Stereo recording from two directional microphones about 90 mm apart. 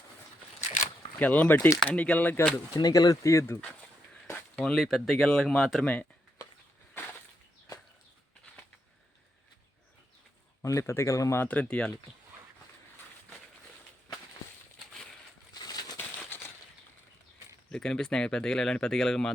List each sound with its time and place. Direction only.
1.2 s speech: 20° left (ahead or behind)
2.7 s speech: 45° left (ahead or behind); by 3.6 s 30° left (ahead or behind)
4.5 s speech: 10° left (ahead or behind)
4.8 s speech: centre (ahead or behind)
5.8 s speech: 15° left (ahead or behind)
10.6 s speech: 35° left (ahead or behind)
11.3 s speech: 15° left (ahead or behind)
15.5 s a sound: 45° left (ahead or behind)
17.7 s speech: 10° left (ahead or behind)